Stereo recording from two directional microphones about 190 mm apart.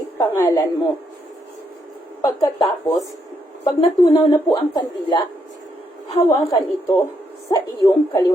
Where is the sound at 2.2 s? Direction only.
15° left (ahead or behind).